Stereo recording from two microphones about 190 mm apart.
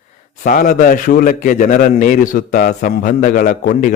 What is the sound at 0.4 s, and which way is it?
A man's voice, 45° left (ahead or behind).